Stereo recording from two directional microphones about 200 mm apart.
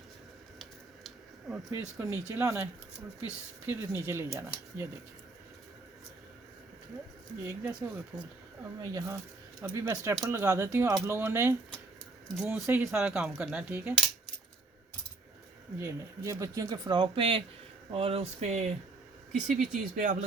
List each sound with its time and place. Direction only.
0.6 s a sound: 5° right (ahead or behind)
2.0 s speech: 15° right (ahead or behind)
3.7 s speech: 10° right (ahead or behind)
7.4 s speech: 10° right (ahead or behind)
15.8 s speech: 15° right (ahead or behind); by 20.1 s 40° right (ahead or behind)